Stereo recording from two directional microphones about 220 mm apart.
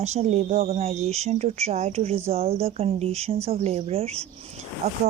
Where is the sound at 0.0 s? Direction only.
30° right (ahead or behind).